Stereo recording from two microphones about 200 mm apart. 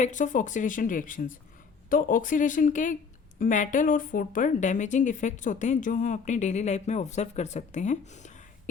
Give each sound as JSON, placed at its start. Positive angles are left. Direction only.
{"t": 0.0, "sound": "speech", "side_deg": 40}